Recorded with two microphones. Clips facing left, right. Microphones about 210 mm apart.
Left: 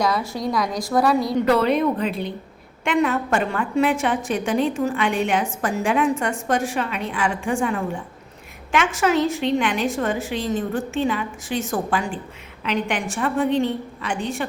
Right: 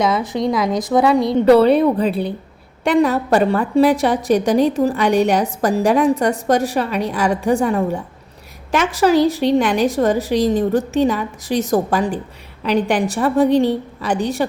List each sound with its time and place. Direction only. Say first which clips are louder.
0.0 s a woman's voice: right 5 dB; 20° right (ahead or behind)
1.3 s a woman's voice: right 7 dB; 30° right (ahead or behind)